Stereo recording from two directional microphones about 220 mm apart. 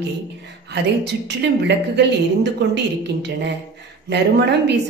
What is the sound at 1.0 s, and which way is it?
A woman's voice, 50° right (ahead or behind).